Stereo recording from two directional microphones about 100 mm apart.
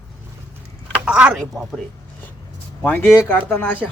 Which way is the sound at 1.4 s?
5° left (ahead or behind).